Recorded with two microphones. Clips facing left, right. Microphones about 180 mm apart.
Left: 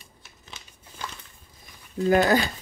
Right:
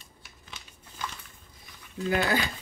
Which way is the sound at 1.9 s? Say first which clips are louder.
Left 7 dB; 40° left (ahead or behind).